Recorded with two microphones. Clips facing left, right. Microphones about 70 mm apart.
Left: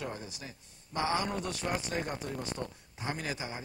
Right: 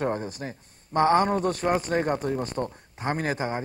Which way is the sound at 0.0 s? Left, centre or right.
Right.